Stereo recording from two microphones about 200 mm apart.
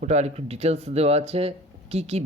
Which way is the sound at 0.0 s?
35° right (ahead or behind).